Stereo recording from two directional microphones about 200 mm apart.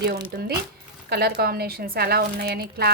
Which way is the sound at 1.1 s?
55° right (ahead or behind).